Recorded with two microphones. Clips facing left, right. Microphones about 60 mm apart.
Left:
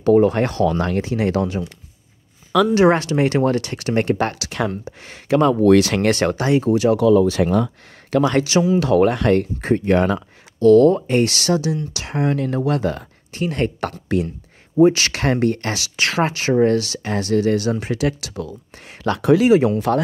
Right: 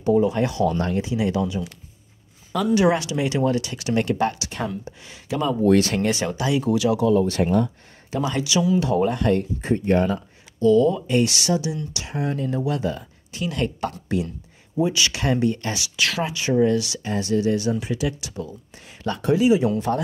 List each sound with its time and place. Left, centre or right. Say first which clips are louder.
0.0 s speech: left 5 dB; left
0.7 s speech: left 3 dB; left
1.0 s speech: left 3 dB; left
2.7 s speech: left 1 dB; left
5.0 s speech: left 9 dB; left
7.4 s speech: left 3 dB; left
8.1 s speech: left 7 dB; left
8.7 s speech: left 5 dB; left
11.0 s speech: left 3 dB; left
11.9 s speech: left 6 dB; left
13.3 s speech: left 4 dB; left
13.7 s speech: left 4 dB; left
16.0 s speech: left 5 dB; left
17.1 s speech: left 3 dB; left